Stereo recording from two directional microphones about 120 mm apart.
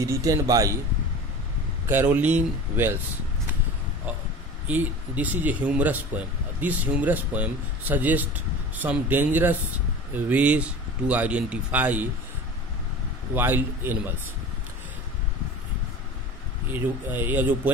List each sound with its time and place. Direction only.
0.0 s speech: 30° right (ahead or behind)
1.9 s speech: 15° right (ahead or behind)
4.6 s speech: 15° right (ahead or behind)
13.3 s speech: 15° right (ahead or behind)
16.7 s speech: 15° right (ahead or behind)